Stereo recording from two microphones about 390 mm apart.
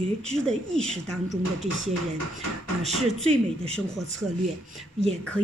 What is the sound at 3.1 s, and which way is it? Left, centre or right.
Speech, centre.